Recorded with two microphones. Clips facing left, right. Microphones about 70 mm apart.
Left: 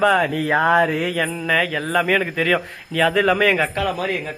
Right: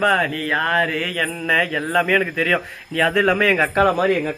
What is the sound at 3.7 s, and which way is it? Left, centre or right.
Speech, right.